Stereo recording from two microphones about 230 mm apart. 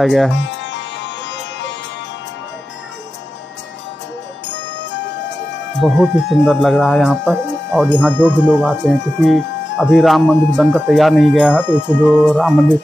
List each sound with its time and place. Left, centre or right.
0.0 s speech: centre
0.3 s music: left
4.9 s music: left
5.8 s speech: centre
8.5 s speech: centre
9.8 s speech: centre
11.6 s speech: centre